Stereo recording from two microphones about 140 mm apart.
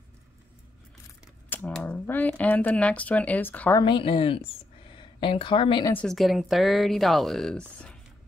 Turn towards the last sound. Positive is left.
turn(degrees=5)  # may be behind; listen again after turning